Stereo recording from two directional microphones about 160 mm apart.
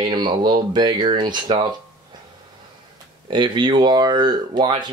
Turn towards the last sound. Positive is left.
turn(degrees=-30)  # may be behind; listen again after turning